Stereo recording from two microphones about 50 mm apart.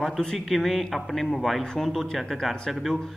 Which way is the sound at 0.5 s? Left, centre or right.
Centre.